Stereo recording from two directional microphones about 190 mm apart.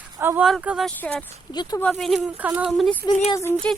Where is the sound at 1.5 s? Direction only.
20° left (ahead or behind).